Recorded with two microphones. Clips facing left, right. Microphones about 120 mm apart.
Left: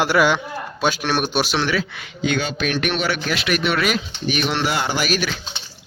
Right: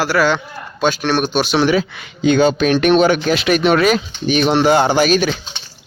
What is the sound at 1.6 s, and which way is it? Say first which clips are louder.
Speech: right 7 dB; 20° right (ahead or behind).